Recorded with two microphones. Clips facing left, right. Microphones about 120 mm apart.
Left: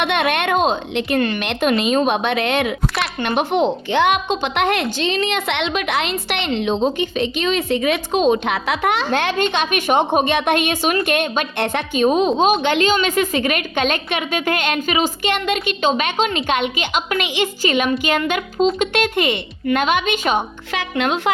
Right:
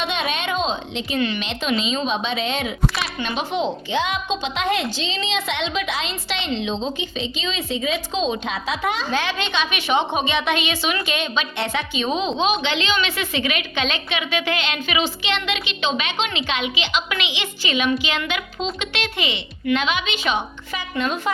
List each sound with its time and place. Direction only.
0.0 s a woman's voice: 60° left (ahead or behind)
20.7 s speech: 70° left (ahead or behind)